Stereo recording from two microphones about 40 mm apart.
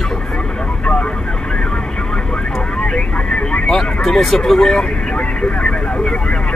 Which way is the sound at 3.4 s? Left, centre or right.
Centre.